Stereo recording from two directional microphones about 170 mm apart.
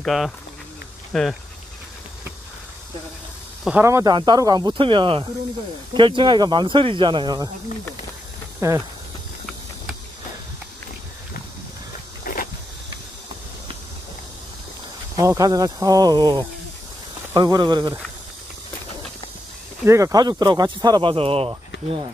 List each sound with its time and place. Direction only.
0.0 s speech: centre (ahead or behind)
3.8 s speech: 20° right (ahead or behind)
8.5 s speech: 15° right (ahead or behind)
12.3 s vehicle: 55° left (ahead or behind)
15.1 s speech: 20° right (ahead or behind)
19.9 s speech: 20° right (ahead or behind)